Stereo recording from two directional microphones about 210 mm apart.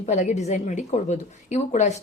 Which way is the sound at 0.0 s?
35° left (ahead or behind).